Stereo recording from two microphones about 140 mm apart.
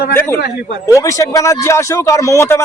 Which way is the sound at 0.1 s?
15° left (ahead or behind).